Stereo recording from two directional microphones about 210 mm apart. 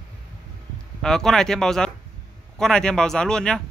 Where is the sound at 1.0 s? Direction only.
5° left (ahead or behind).